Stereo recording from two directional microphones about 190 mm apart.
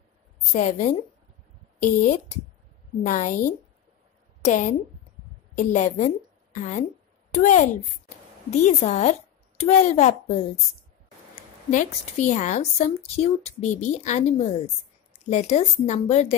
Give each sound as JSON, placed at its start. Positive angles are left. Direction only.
{"t": 0.5, "sound": "a woman's voice", "side_deg": 40}
{"t": 11.7, "sound": "speech", "side_deg": 40}